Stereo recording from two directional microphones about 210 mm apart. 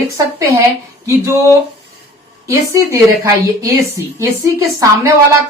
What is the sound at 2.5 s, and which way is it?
Speech, 15° right (ahead or behind).